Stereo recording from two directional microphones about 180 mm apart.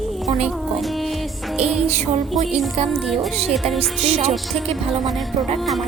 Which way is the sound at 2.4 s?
Centre (ahead or behind).